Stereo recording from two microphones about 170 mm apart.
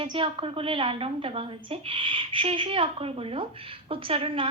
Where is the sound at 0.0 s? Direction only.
30° right (ahead or behind).